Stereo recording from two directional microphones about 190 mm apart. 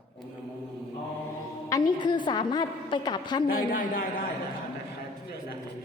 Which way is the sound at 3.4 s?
50° left (ahead or behind).